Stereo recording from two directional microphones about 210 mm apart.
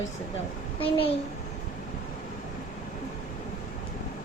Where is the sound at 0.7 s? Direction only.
25° left (ahead or behind).